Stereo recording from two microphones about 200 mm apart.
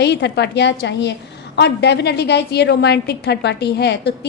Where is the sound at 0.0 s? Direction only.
60° left (ahead or behind).